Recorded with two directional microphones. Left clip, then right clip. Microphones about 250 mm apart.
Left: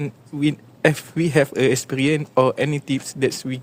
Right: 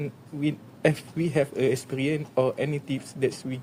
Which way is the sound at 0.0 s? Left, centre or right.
Left.